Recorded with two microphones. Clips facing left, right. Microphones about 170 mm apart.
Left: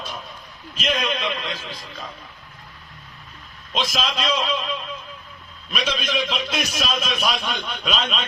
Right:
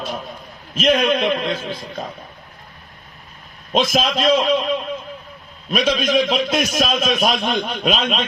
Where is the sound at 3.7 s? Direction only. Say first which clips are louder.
Right 7 dB; 50° right (ahead or behind).